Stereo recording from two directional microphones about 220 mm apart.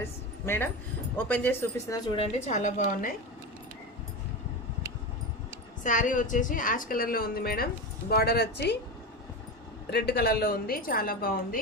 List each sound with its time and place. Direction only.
0.4 s speech: 10° left (ahead or behind)
2.1 s a woman's voice: 30° left (ahead or behind)
5.8 s a woman's voice: 35° left (ahead or behind)
9.9 s a woman's voice: 45° left (ahead or behind)